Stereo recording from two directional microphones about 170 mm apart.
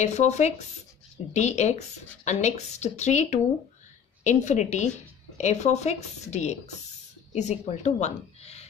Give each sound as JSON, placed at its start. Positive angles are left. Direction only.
{"t": 0.0, "sound": "a woman's voice", "side_deg": 40}